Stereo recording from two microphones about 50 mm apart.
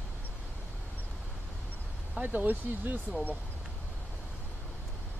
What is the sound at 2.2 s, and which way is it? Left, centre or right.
Speech, right.